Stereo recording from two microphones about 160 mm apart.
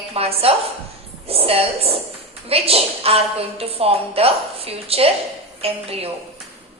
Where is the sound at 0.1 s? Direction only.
40° right (ahead or behind).